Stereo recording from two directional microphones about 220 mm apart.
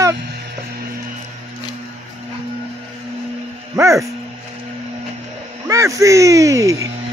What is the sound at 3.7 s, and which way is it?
Speech, 15° right (ahead or behind).